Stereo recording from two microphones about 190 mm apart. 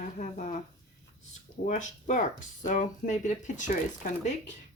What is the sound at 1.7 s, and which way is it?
Speech, 40° left (ahead or behind).